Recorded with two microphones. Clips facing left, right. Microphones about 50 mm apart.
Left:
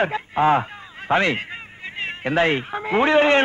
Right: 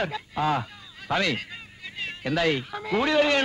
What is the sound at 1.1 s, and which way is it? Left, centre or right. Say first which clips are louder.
A man's voice: left 6 dB; left.